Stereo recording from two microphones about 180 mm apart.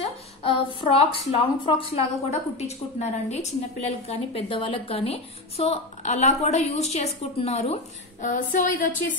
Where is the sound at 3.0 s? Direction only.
35° left (ahead or behind).